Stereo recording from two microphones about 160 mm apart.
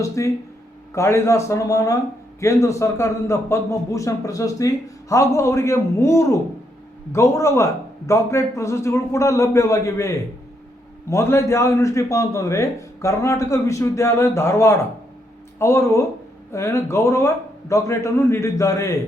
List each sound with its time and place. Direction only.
0.2 s a man's voice: 20° left (ahead or behind)